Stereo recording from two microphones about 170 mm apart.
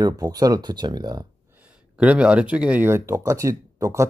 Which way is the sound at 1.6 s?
5° right (ahead or behind).